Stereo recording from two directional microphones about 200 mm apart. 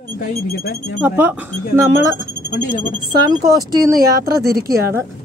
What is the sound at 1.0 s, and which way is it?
A woman's voice, 10° right (ahead or behind).